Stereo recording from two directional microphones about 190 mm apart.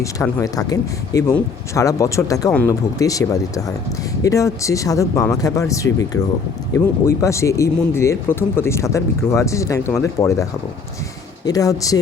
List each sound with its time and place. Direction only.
0.0 s speech: 15° left (ahead or behind)
11.4 s speech: 20° left (ahead or behind)